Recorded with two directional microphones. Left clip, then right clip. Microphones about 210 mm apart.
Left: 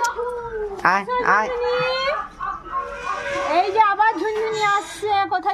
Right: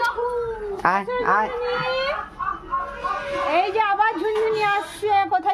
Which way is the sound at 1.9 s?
15° left (ahead or behind).